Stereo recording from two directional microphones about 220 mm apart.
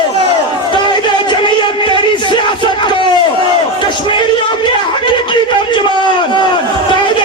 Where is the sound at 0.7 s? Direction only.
20° left (ahead or behind).